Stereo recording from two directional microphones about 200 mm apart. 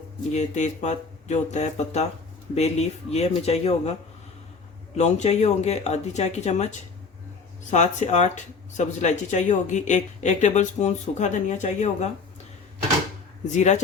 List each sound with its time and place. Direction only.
0.3 s speech: 35° left (ahead or behind)
4.9 s speech: 35° left (ahead or behind)
13.5 s speech: 35° left (ahead or behind)